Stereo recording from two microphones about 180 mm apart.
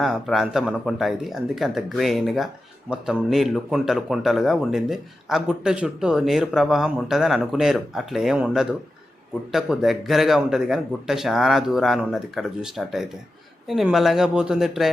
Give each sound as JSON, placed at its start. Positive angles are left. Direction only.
{"t": 0.0, "sound": "speech", "side_deg": 0}